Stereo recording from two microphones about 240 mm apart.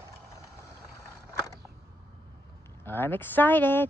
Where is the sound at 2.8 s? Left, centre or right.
Centre.